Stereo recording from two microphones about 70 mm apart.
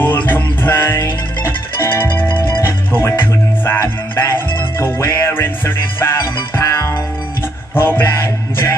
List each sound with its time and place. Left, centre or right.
0.0 s music: left
6.6 s music: left
7.7 s music: left